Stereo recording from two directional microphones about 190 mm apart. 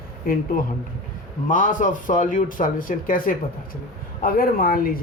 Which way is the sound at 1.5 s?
45° left (ahead or behind).